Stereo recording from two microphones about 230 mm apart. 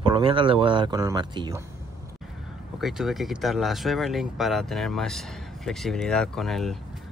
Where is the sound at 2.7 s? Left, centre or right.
Centre.